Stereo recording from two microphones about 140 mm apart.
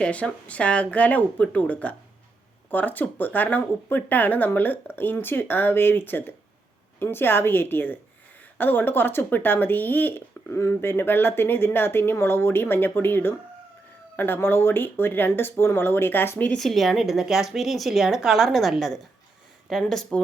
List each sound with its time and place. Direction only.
0.0 s speech: 10° left (ahead or behind)
16.6 s speech: centre (ahead or behind)